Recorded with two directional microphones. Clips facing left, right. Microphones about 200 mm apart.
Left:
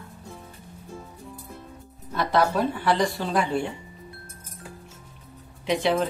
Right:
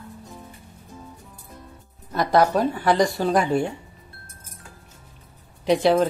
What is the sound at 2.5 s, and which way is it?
Speech, 45° right (ahead or behind).